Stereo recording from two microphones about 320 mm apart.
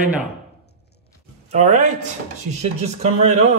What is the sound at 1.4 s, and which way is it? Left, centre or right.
A man's voice, right.